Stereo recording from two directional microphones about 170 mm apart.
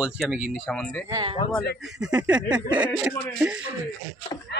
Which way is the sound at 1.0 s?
20° right (ahead or behind).